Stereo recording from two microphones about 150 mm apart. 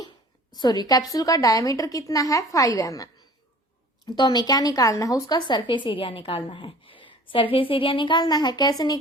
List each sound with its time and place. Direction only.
0.5 s a woman's voice: 25° left (ahead or behind)